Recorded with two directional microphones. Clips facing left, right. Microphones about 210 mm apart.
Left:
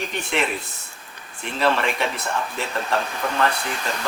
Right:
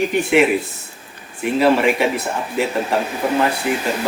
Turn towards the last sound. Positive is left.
turn(degrees=-10)  # may be behind; listen again after turning